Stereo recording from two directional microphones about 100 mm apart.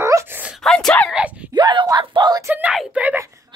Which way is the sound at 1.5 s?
45° right (ahead or behind).